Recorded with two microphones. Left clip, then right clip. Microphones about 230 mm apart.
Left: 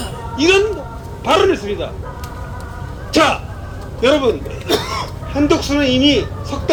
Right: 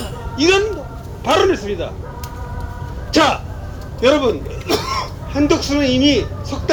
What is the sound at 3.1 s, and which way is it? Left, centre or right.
Speech, centre.